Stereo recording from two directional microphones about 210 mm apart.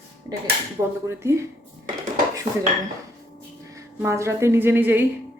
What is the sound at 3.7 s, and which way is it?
A woman's voice, 15° right (ahead or behind).